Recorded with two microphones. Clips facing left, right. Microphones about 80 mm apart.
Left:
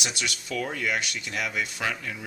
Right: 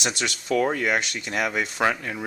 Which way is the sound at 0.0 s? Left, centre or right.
Right.